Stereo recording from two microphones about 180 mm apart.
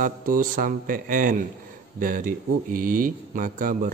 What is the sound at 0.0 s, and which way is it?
A man's voice, 50° right (ahead or behind).